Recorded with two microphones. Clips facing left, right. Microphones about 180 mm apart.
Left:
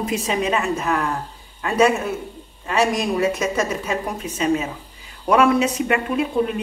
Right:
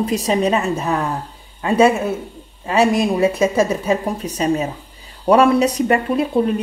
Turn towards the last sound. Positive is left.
turn(degrees=-35)  # may be behind; listen again after turning